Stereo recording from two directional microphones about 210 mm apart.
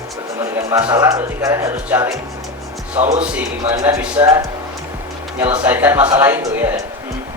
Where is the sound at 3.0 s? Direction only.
30° right (ahead or behind).